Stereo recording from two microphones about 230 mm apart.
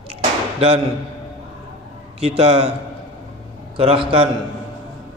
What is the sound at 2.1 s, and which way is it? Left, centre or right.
Speech, right.